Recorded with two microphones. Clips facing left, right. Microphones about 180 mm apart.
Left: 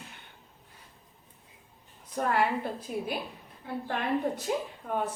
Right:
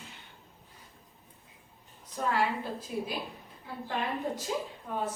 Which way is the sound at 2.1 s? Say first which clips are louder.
Left 2 dB; 55° left (ahead or behind).